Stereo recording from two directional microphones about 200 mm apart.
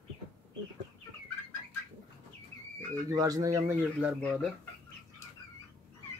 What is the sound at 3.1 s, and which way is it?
Speech, 15° right (ahead or behind).